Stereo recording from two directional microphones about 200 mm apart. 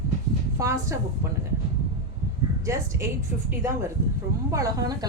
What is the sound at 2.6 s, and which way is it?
A woman's voice, 15° right (ahead or behind).